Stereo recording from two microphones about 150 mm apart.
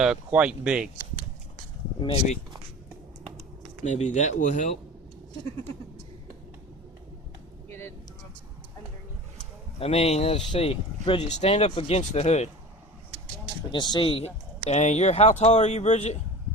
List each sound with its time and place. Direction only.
0.0 s speech: 5° right (ahead or behind)
2.0 s speech: 35° left (ahead or behind)
3.8 s speech: 50° left (ahead or behind)
9.7 s speech: 40° left (ahead or behind)
11.3 s speech: 50° left (ahead or behind)
13.7 s speech: 30° left (ahead or behind); by 16.1 s 50° left (ahead or behind)